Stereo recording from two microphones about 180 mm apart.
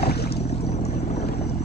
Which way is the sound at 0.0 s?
65° left (ahead or behind).